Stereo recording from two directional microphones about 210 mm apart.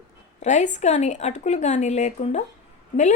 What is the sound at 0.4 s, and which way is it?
A woman's voice, 35° left (ahead or behind).